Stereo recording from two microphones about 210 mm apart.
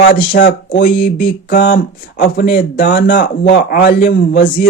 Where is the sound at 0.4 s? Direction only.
40° left (ahead or behind).